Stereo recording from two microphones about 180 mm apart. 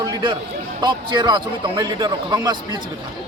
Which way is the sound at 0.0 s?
25° right (ahead or behind).